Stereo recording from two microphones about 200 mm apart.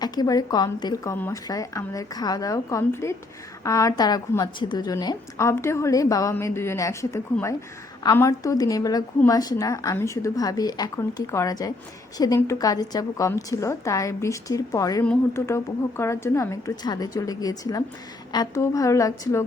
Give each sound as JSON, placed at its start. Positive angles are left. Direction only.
{"t": 0.0, "sound": "a woman's voice", "side_deg": 20}